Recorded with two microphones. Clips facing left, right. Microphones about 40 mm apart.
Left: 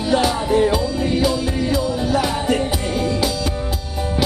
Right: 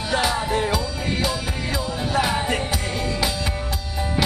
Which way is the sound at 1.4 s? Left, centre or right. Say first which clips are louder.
Left 7 dB; centre.